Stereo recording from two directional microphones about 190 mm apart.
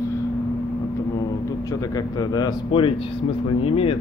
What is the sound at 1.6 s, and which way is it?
Speech, 20° left (ahead or behind).